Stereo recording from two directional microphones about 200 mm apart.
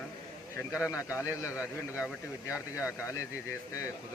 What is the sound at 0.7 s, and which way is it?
Speech, 5° right (ahead or behind).